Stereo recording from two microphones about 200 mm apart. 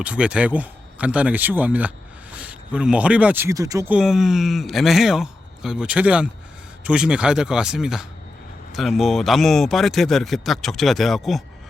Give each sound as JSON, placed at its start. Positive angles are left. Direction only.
{"t": 0.0, "sound": "speech", "side_deg": -5}